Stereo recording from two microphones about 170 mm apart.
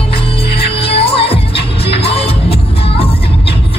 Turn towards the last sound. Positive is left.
turn(degrees=35)  # may be behind; listen again after turning